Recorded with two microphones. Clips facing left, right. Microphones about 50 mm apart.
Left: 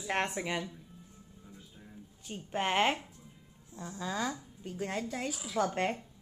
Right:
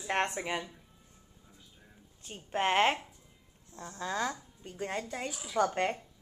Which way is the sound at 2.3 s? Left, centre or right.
Centre.